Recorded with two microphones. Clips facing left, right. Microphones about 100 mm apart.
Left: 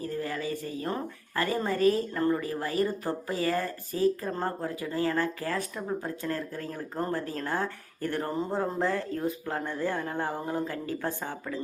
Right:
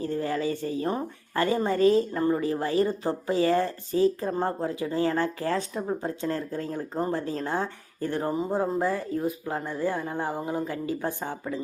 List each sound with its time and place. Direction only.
0.0 s a sound: 30° right (ahead or behind)
1.4 s speech: 25° right (ahead or behind)
8.3 s speech: 10° right (ahead or behind)